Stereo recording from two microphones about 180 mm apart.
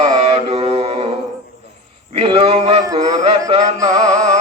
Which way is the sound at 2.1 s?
30° right (ahead or behind).